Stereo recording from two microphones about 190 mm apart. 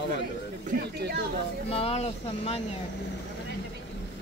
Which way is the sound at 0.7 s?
50° right (ahead or behind).